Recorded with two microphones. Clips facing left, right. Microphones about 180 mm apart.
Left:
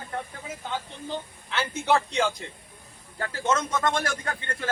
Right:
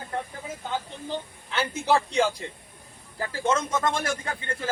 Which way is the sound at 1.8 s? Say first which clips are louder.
Right 1 dB; 35° right (ahead or behind).